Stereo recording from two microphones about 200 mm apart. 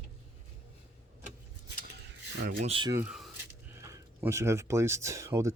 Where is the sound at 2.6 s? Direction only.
25° right (ahead or behind).